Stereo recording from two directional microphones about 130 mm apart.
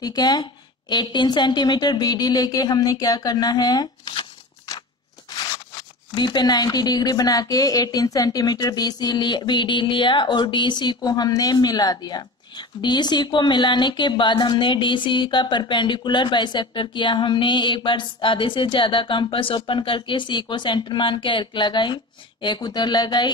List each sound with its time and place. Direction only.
0.0 s speech: 30° left (ahead or behind)
6.1 s speech: 35° left (ahead or behind)